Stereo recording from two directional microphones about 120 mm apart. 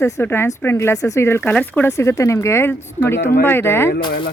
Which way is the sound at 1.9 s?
25° left (ahead or behind).